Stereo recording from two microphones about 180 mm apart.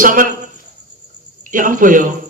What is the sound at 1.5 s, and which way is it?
Speech, 50° right (ahead or behind).